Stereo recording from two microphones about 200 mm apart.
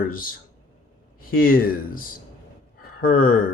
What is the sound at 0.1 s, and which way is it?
Speech, 45° left (ahead or behind).